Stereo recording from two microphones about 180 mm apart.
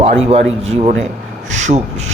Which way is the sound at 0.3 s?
35° right (ahead or behind).